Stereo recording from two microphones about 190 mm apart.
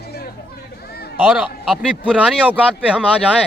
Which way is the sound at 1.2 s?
5° right (ahead or behind).